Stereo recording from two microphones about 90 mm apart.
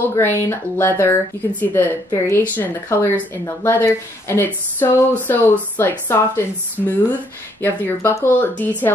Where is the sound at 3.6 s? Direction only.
25° left (ahead or behind).